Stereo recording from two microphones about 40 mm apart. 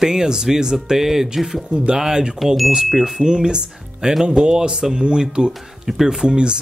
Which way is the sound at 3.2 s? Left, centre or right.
Centre.